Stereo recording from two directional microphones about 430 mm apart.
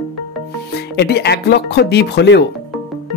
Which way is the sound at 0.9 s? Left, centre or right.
Left.